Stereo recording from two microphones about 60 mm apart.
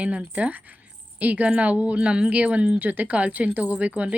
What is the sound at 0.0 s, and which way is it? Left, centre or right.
A woman's voice, right.